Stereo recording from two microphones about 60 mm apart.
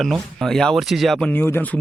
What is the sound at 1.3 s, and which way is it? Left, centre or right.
Speech, left.